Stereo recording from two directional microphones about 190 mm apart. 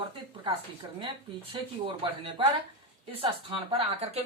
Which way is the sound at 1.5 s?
25° right (ahead or behind).